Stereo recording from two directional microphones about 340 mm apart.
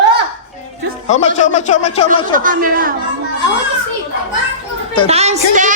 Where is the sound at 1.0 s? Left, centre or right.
Left.